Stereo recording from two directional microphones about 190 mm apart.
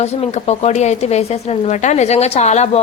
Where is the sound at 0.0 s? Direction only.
35° left (ahead or behind).